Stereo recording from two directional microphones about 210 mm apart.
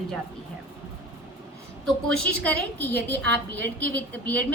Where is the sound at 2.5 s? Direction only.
55° right (ahead or behind).